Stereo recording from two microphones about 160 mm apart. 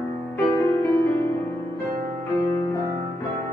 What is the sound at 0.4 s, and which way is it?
Music, 10° left (ahead or behind).